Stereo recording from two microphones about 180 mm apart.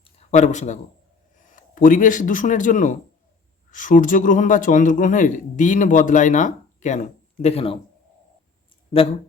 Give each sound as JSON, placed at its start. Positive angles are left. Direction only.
{"t": 0.2, "sound": "speech", "side_deg": 40}
{"t": 8.9, "sound": "speech", "side_deg": 30}